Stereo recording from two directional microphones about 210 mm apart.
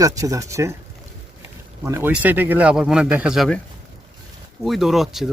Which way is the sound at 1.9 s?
10° right (ahead or behind).